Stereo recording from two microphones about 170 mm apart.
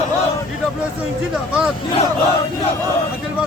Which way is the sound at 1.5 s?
5° right (ahead or behind).